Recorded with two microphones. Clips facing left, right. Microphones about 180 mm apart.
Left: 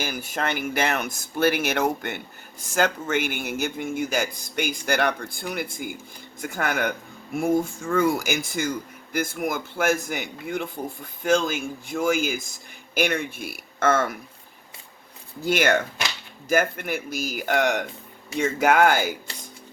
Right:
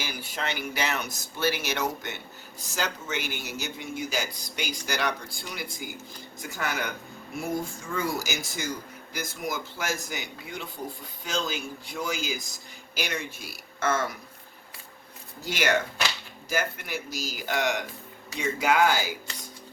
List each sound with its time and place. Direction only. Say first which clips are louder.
0.0 s speech: left 6 dB; 50° left (ahead or behind)
15.4 s speech: left 5 dB; 55° left (ahead or behind)